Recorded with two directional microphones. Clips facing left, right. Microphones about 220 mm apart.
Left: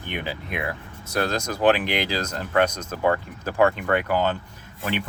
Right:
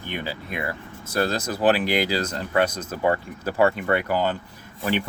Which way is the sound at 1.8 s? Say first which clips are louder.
Right 3 dB; 40° right (ahead or behind).